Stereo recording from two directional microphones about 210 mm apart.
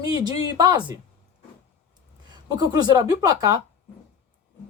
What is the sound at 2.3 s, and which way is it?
Speech, 20° right (ahead or behind).